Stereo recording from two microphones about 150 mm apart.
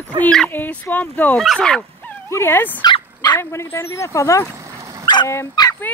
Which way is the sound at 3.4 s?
20° left (ahead or behind).